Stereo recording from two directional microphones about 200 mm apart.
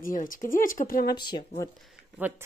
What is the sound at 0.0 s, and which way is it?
Speech, 40° left (ahead or behind).